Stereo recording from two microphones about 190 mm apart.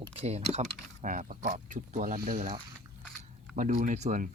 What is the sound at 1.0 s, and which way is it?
Speech, 40° right (ahead or behind).